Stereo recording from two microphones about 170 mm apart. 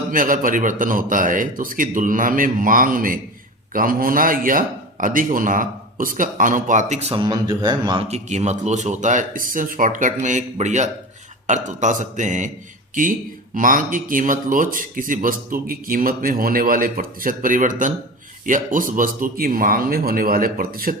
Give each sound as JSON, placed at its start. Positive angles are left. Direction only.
{"t": 0.1, "sound": "speech", "side_deg": -55}
{"t": 7.1, "sound": "speech", "side_deg": -25}